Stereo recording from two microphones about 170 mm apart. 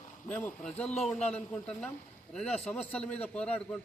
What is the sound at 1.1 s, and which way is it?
Speech, 40° left (ahead or behind).